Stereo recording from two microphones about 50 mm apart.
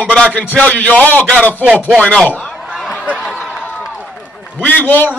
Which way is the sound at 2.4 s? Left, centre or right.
Centre.